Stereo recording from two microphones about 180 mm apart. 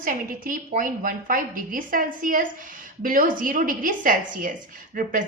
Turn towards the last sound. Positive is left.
turn(degrees=-50)  # may be behind; listen again after turning